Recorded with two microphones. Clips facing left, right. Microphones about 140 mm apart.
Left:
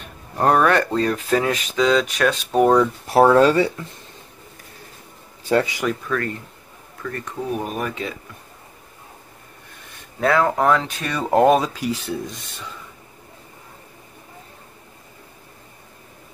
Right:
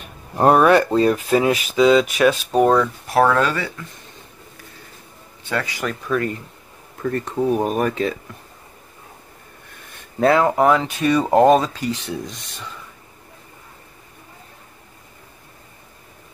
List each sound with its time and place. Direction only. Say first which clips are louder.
0.4 s speech: right 3 dB; 10° right (ahead or behind)
3.1 s speech: left 4 dB; 30° left (ahead or behind)
5.6 s speech: left 5 dB; 20° left (ahead or behind)
6.0 s speech: right 3 dB; 15° right (ahead or behind)
7.0 s speech: right 7 dB; 35° right (ahead or behind)
10.4 s speech: right 2 dB; 10° right (ahead or behind)